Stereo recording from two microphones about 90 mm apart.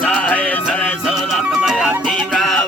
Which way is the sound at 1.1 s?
5° right (ahead or behind).